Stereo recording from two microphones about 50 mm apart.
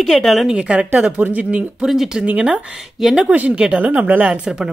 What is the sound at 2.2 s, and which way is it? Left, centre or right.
Speech, right.